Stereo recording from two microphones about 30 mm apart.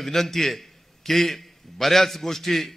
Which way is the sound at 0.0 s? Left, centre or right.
Centre.